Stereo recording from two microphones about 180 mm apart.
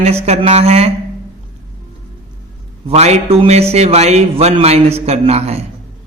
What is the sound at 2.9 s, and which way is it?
Speech, 35° right (ahead or behind).